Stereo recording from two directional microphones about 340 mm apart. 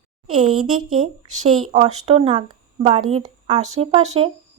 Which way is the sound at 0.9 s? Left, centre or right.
Centre.